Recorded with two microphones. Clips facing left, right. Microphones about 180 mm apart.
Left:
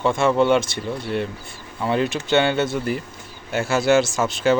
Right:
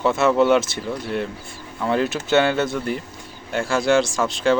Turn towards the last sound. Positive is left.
turn(degrees=5)  # may be behind; listen again after turning